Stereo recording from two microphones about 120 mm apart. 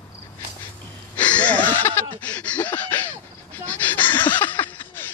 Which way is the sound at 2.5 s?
10° left (ahead or behind).